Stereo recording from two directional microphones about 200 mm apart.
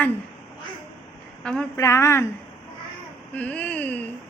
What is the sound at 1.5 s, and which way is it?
Speech, 10° left (ahead or behind).